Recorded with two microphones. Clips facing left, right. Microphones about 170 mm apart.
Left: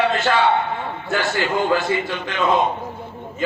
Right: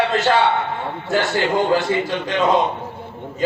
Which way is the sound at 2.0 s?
35° right (ahead or behind).